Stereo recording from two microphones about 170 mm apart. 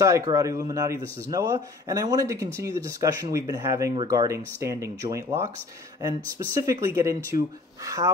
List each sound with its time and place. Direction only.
0.0 s speech: 20° right (ahead or behind)